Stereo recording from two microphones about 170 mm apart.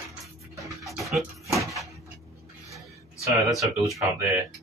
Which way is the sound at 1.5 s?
20° right (ahead or behind).